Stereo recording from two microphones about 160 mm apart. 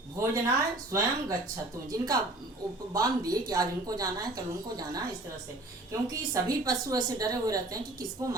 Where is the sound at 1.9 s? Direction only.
20° right (ahead or behind).